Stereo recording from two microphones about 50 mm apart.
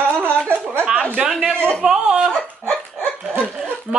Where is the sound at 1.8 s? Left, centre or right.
Centre.